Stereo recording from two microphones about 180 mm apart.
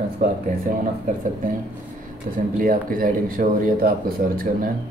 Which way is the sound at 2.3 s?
50° right (ahead or behind).